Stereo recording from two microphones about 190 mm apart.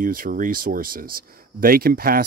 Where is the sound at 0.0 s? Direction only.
45° right (ahead or behind).